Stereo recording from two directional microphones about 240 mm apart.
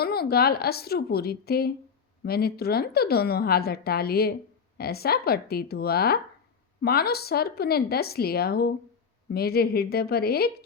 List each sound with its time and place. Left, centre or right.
0.0 s a woman's voice: left